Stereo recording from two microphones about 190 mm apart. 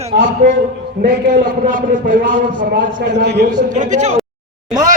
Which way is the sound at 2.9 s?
65° right (ahead or behind).